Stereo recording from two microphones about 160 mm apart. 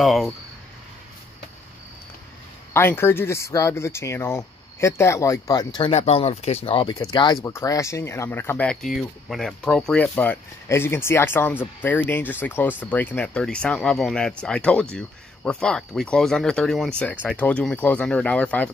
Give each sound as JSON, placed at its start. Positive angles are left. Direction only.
{"t": 0.0, "sound": "speech", "side_deg": 0}
{"t": 2.7, "sound": "speech", "side_deg": 15}
{"t": 6.9, "sound": "speech", "side_deg": 25}